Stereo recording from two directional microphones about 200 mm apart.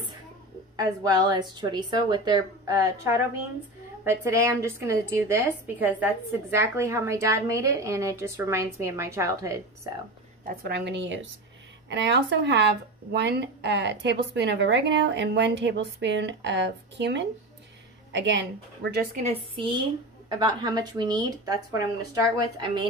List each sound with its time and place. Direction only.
0.7 s a woman's voice: 20° right (ahead or behind)
10.4 s a woman's voice: 50° right (ahead or behind)
18.9 s a woman's voice: 50° right (ahead or behind)
19.2 s a woman's voice: 25° right (ahead or behind)